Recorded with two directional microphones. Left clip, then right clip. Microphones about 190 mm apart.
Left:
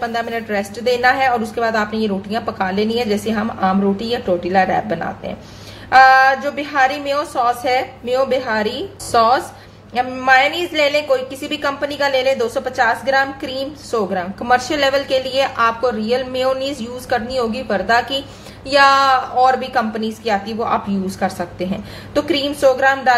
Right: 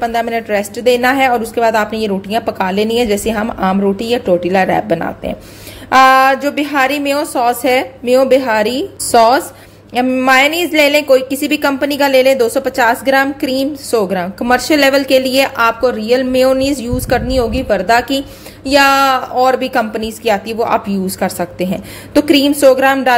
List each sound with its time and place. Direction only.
0.0 s a woman's voice: 40° right (ahead or behind)